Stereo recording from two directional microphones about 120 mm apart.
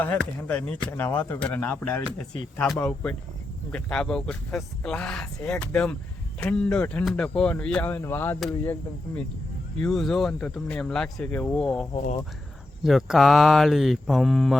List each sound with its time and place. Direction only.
0.0 s speech: 15° left (ahead or behind)
7.9 s speech: 20° left (ahead or behind)
9.8 s speech: centre (ahead or behind)